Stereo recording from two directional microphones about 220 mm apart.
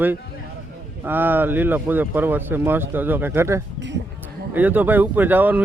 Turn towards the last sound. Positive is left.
turn(degrees=-10)  # may be behind; listen again after turning